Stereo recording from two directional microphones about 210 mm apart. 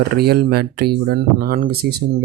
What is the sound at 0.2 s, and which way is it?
Speech, 50° right (ahead or behind).